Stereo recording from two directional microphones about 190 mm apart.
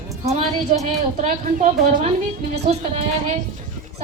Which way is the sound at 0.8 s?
40° right (ahead or behind).